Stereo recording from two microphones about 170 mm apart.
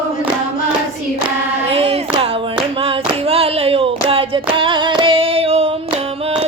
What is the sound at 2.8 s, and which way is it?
Clapping, 35° right (ahead or behind).